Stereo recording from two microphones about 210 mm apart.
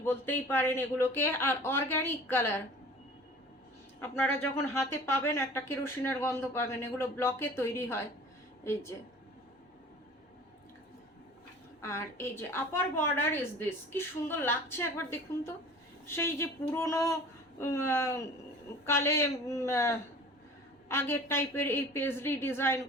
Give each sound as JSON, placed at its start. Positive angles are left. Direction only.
{"t": 0.0, "sound": "speech", "side_deg": 10}
{"t": 4.0, "sound": "speech", "side_deg": 10}
{"t": 11.8, "sound": "speech", "side_deg": 10}